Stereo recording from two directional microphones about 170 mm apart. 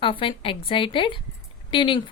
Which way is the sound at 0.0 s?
30° left (ahead or behind).